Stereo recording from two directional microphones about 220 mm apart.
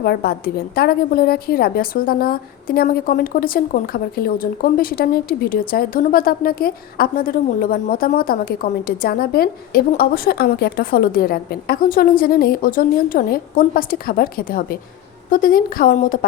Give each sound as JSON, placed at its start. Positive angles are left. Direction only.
{"t": 0.0, "sound": "a woman's voice", "side_deg": 45}